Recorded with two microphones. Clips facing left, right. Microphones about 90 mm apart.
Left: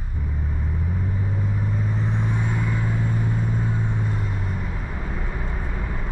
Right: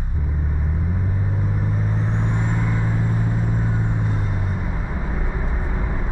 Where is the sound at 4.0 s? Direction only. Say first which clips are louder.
Right 2 dB; 10° right (ahead or behind).